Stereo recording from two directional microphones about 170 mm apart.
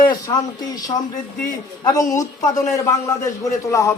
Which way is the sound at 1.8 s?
20° left (ahead or behind).